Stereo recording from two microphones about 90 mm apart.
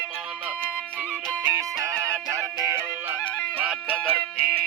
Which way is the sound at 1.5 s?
35° right (ahead or behind).